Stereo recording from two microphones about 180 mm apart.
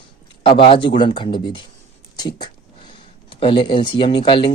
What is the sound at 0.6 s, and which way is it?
Speech, 30° left (ahead or behind).